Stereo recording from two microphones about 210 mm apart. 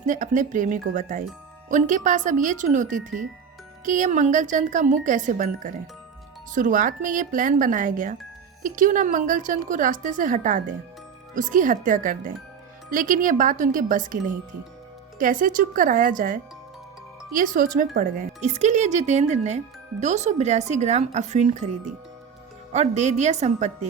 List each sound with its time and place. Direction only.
0.0 s speech: 40° right (ahead or behind)
22.7 s speech: 35° right (ahead or behind)